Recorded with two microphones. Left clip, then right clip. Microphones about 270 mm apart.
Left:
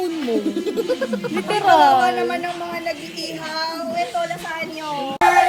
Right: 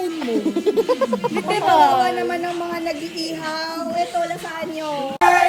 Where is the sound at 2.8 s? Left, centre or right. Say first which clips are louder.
Right 1 dB; right.